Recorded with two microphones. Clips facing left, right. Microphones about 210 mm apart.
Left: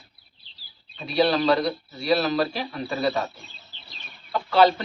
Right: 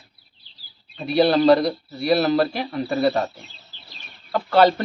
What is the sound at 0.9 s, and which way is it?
Speech, 55° right (ahead or behind).